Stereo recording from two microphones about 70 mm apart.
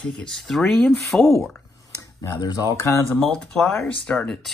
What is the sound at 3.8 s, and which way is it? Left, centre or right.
Speech, centre.